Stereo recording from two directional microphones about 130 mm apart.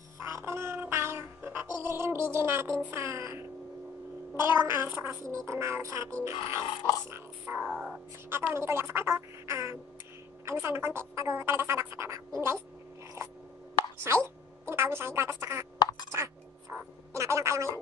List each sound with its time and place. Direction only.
0.2 s music: 20° right (ahead or behind)
2.9 s a woman's voice: 20° right (ahead or behind)
7.1 s music: 15° right (ahead or behind)
7.6 s speech: centre (ahead or behind)
8.3 s a woman's voice: 20° right (ahead or behind)
14.0 s speech: 20° right (ahead or behind)
15.8 s a sound: 35° left (ahead or behind)
17.1 s a woman's voice: 20° right (ahead or behind)